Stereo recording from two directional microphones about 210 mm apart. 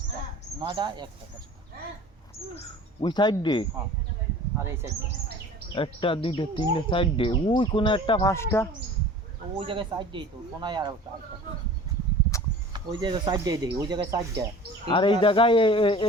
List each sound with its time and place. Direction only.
0.6 s speech: 20° right (ahead or behind)
2.6 s speech: 20° left (ahead or behind)
4.5 s speech: 10° right (ahead or behind)
5.7 s speech: 25° left (ahead or behind)
9.6 s speech: 25° right (ahead or behind)
12.7 s speech: 20° right (ahead or behind)
14.8 s speech: 25° left (ahead or behind)